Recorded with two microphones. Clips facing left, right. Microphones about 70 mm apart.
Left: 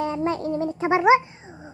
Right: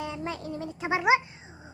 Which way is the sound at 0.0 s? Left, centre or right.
Left.